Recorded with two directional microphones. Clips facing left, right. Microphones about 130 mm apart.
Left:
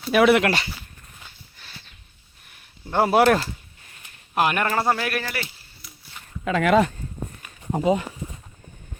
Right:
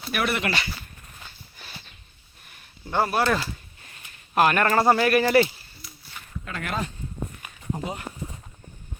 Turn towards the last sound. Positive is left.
turn(degrees=80)